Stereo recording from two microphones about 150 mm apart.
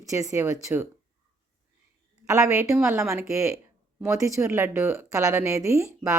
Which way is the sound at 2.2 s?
20° right (ahead or behind).